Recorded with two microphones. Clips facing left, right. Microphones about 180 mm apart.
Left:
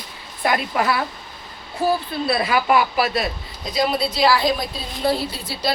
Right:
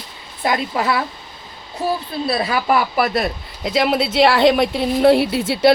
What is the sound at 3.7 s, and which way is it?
A woman's voice, 75° right (ahead or behind).